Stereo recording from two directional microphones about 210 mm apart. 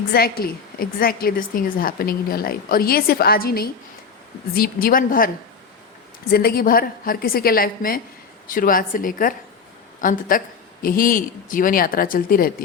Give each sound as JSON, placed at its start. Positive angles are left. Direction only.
{"t": 0.1, "sound": "a woman's voice", "side_deg": 45}
{"t": 6.3, "sound": "a woman's voice", "side_deg": 45}